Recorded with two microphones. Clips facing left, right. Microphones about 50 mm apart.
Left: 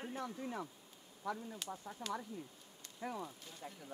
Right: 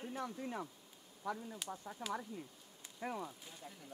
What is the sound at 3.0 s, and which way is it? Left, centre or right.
Speech, right.